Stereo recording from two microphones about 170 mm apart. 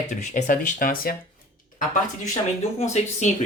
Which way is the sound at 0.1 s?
45° left (ahead or behind).